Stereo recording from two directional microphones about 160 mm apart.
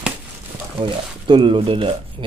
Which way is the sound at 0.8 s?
30° right (ahead or behind).